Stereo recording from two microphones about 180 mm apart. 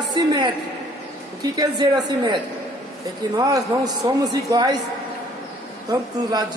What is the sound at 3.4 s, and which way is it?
Speech, 20° right (ahead or behind).